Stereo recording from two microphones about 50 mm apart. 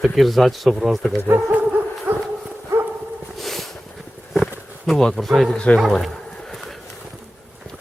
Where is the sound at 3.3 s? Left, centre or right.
Centre.